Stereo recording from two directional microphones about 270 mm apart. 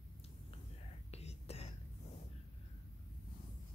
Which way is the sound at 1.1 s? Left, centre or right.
Left.